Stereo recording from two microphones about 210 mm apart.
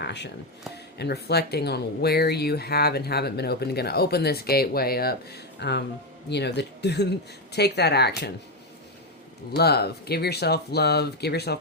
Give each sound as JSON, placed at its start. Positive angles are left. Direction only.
{"t": 0.0, "sound": "a sound", "side_deg": 55}
{"t": 0.9, "sound": "speech", "side_deg": 50}
{"t": 9.5, "sound": "speech", "side_deg": 50}